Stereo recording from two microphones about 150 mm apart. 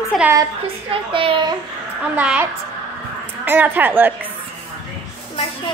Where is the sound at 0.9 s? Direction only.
35° right (ahead or behind).